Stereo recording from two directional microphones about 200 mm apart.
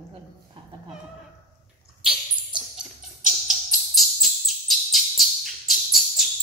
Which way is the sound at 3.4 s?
Centre (ahead or behind).